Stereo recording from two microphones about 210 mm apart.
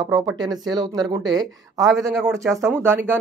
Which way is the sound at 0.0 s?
20° right (ahead or behind).